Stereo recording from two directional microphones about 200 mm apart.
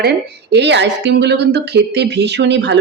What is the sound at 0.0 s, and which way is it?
A woman's voice, 55° right (ahead or behind).